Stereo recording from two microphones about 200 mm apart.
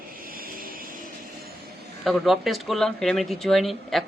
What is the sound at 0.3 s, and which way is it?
Vehicle, 45° right (ahead or behind).